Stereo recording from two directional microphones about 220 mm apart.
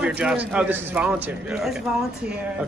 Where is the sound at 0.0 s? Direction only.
5° right (ahead or behind).